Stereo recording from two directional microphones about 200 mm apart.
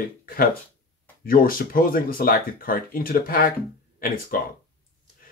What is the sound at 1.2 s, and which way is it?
Speech, 45° left (ahead or behind).